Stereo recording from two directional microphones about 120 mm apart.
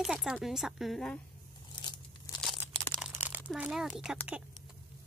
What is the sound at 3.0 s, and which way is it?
Crumpling, 15° right (ahead or behind).